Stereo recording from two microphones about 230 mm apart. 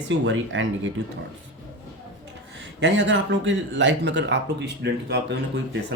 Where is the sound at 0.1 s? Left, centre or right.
Right.